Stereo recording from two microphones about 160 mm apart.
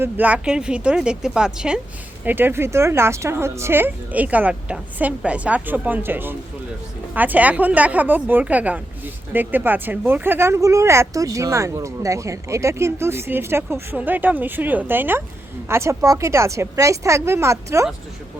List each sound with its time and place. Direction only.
0.0 s speech: 10° right (ahead or behind)